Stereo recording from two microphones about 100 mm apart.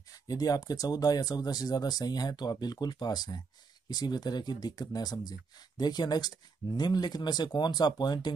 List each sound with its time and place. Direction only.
0.1 s speech: 40° left (ahead or behind)